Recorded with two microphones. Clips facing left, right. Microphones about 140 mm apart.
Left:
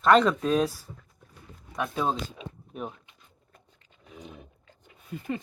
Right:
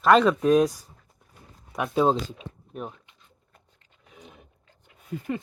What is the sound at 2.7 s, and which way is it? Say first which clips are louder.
Speech: right 1 dB; centre (ahead or behind).